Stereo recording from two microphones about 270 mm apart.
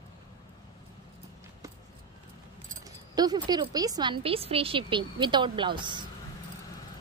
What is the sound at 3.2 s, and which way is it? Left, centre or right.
A woman's voice, centre.